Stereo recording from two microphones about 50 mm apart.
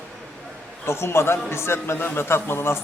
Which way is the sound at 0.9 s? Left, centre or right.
Left.